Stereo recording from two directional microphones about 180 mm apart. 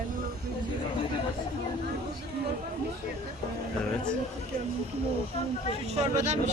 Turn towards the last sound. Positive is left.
turn(degrees=-35)  # may be behind; listen again after turning